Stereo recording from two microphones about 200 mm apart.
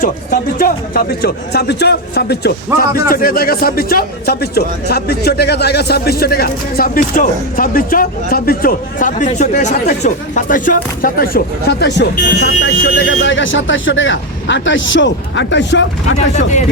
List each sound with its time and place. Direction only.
0.0 s speech: 45° left (ahead or behind)
2.6 s speech: 15° right (ahead or behind)
3.1 s speech: 45° left (ahead or behind); by 15.9 s 65° left (ahead or behind)
16.1 s speech: 35° left (ahead or behind)